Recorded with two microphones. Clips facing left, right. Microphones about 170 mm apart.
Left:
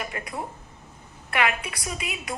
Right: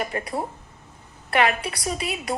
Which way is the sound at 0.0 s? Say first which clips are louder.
Right 5 dB; 35° right (ahead or behind).